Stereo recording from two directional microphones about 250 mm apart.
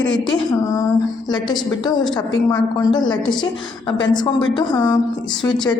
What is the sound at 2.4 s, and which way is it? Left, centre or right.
A woman's voice, centre.